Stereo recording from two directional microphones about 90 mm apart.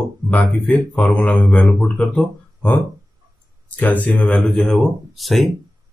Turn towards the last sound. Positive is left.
turn(degrees=0)  # may be behind; listen again after turning